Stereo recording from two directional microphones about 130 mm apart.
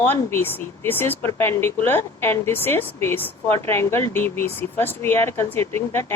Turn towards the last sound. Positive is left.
turn(degrees=20)  # may be behind; listen again after turning